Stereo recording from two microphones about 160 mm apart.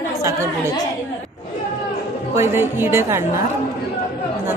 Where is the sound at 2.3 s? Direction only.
15° right (ahead or behind).